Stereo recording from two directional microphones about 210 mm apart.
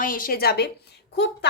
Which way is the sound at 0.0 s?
40° left (ahead or behind).